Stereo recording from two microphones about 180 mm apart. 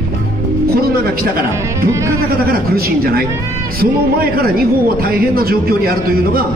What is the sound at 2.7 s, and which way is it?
Speech, 55° right (ahead or behind).